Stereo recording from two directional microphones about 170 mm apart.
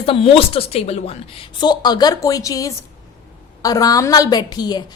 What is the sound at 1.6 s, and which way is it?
A woman's voice, 25° left (ahead or behind).